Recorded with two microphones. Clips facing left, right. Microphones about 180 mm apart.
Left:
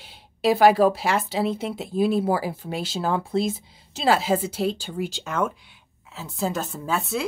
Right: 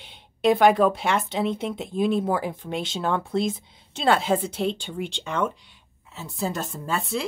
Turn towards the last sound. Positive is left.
turn(degrees=0)  # may be behind; listen again after turning